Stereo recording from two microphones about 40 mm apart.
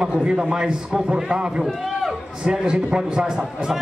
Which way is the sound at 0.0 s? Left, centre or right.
Right.